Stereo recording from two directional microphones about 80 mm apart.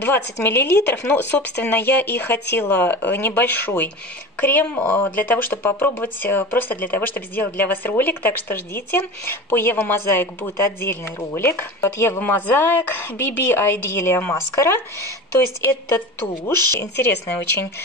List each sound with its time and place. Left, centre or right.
0.0 s speech: left